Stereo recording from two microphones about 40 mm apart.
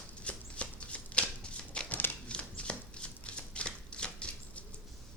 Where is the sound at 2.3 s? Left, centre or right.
Left.